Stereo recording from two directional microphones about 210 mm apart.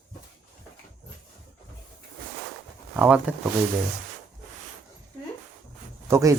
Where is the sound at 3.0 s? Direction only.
5° right (ahead or behind).